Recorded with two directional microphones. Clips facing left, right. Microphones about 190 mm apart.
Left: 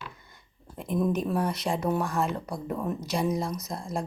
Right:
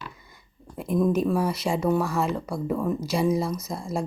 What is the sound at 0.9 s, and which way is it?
Speech, centre (ahead or behind).